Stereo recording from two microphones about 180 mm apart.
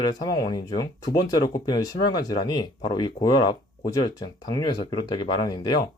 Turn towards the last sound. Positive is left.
turn(degrees=25)  # may be behind; listen again after turning